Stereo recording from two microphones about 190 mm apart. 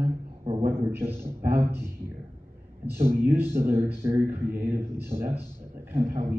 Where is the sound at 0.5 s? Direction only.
30° right (ahead or behind).